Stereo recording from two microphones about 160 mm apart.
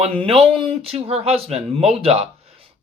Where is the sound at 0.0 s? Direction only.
35° right (ahead or behind).